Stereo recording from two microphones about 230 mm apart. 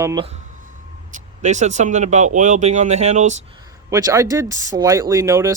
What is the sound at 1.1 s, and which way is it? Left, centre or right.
Speech, right.